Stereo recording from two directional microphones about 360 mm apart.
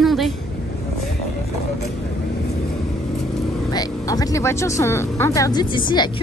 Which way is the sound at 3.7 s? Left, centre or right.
Centre.